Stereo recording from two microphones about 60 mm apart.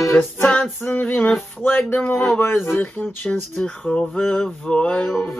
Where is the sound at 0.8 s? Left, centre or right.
Left.